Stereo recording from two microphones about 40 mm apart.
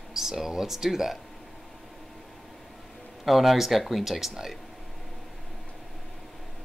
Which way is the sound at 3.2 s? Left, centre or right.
Centre.